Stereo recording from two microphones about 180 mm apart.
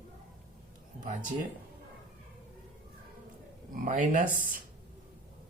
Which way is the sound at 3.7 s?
45° right (ahead or behind).